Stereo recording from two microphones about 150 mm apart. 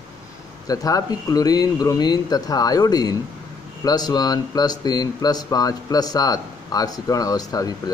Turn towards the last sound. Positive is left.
turn(degrees=25)  # may be behind; listen again after turning